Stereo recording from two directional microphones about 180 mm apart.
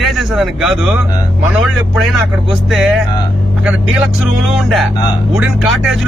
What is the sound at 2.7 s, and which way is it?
Speech, centre (ahead or behind).